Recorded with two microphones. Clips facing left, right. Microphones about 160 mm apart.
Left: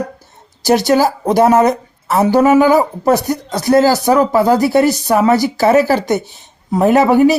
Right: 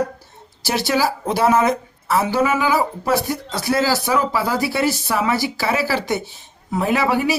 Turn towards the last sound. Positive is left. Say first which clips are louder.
# left 9 dB
turn(degrees=45)  # may be behind; listen again after turning